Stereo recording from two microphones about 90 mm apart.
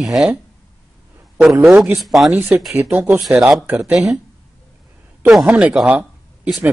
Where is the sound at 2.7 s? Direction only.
25° right (ahead or behind).